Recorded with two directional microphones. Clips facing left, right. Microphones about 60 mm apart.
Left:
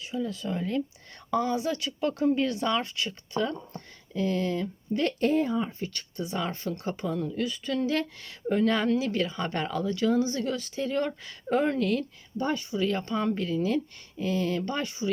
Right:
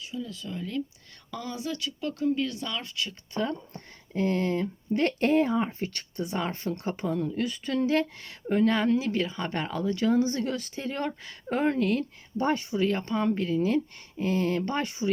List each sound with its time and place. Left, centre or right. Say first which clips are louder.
0.0 s speech: left 5 dB; left
1.3 s speech: left 7 dB; centre
4.1 s speech: right 1 dB; right
5.3 s speech: right 2 dB; right
6.7 s speech: right 1 dB; right
8.4 s speech: right 1 dB; centre
9.9 s speech: right 2 dB; right
10.8 s speech: left 4 dB; centre
12.4 s speech: right 2 dB; right
13.0 s speech: right 1 dB; centre; by 14.8 s right